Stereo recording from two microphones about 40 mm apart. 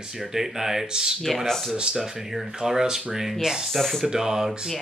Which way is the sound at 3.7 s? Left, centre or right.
Centre.